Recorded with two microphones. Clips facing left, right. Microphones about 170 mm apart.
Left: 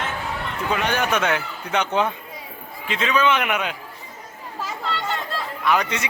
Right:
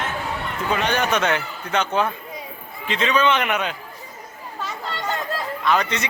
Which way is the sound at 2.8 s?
5° left (ahead or behind).